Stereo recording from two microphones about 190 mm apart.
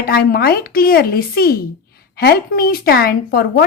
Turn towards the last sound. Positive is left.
turn(degrees=50)  # may be behind; listen again after turning